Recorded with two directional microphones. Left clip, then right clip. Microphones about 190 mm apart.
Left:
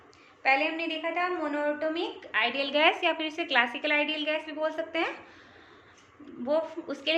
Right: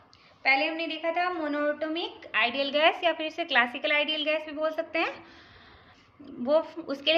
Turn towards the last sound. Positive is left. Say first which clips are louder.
# right 3 dB
turn(degrees=-30)  # may be behind; listen again after turning